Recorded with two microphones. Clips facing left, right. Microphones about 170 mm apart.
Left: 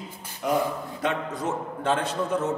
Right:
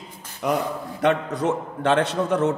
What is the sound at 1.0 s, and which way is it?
A man's voice, 70° right (ahead or behind).